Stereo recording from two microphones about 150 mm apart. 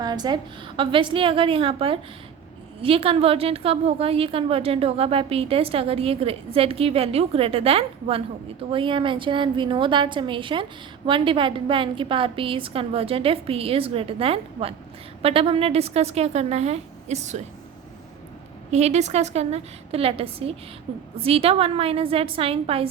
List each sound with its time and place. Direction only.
0.0 s a woman's voice: 25° right (ahead or behind); by 17.4 s 50° right (ahead or behind)
18.7 s a woman's voice: 50° right (ahead or behind)